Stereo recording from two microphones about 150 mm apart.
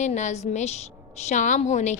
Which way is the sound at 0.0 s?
50° left (ahead or behind).